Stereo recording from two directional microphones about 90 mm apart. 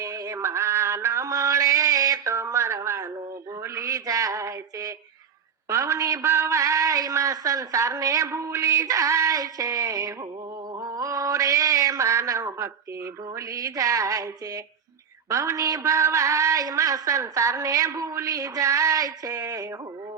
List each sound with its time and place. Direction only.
0.0 s a sound: 40° right (ahead or behind)
5.6 s a man's voice: 35° right (ahead or behind)
10.8 s mantra: 40° right (ahead or behind)
13.5 s a woman's voice: 40° right (ahead or behind)